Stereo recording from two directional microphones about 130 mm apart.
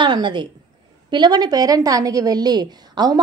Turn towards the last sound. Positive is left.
turn(degrees=-30)  # may be behind; listen again after turning